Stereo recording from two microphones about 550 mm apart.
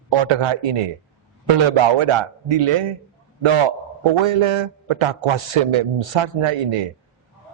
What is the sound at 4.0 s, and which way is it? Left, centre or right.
A man's voice, right.